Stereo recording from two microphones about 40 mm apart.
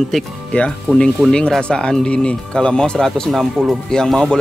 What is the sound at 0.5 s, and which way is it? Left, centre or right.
Speech, left.